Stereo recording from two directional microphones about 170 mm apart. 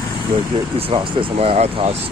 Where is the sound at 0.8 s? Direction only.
30° right (ahead or behind).